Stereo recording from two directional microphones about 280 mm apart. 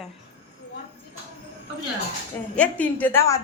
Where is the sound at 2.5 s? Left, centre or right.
Centre.